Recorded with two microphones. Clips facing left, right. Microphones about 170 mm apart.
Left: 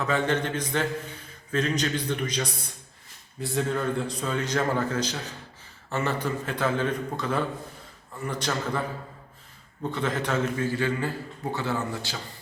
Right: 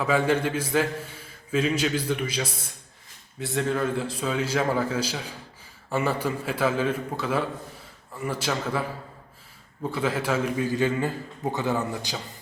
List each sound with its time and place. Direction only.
0.0 s a man's voice: 10° right (ahead or behind)
9.9 s a man's voice: 10° right (ahead or behind)